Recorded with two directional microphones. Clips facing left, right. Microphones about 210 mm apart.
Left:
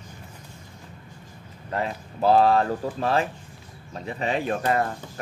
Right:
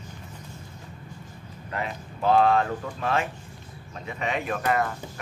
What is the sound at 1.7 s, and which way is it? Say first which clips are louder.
Speech: left 4 dB; 35° left (ahead or behind).